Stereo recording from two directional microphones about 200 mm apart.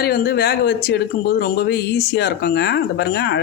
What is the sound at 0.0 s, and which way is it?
Speech, 50° left (ahead or behind).